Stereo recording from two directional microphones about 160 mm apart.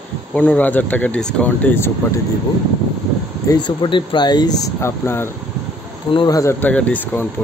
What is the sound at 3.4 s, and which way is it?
Speech, 25° left (ahead or behind).